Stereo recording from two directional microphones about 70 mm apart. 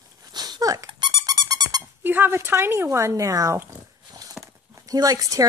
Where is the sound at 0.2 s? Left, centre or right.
Right.